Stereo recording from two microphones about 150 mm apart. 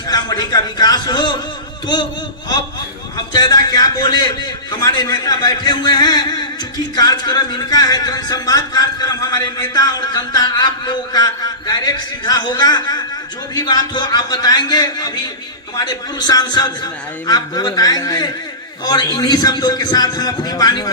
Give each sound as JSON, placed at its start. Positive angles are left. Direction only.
{"t": 0.1, "sound": "speech", "side_deg": 25}
{"t": 3.3, "sound": "a man's voice", "side_deg": 30}